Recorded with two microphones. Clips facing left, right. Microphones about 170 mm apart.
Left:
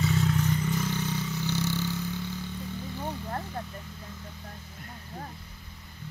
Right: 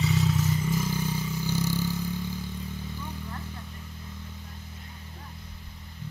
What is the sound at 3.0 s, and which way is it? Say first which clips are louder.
Vehicle: left 4 dB; 50° left (ahead or behind).